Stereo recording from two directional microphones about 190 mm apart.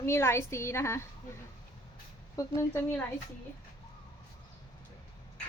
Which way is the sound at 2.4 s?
20° left (ahead or behind).